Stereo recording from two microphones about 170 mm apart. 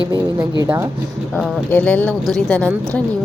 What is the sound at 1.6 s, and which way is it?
Speech, 10° left (ahead or behind).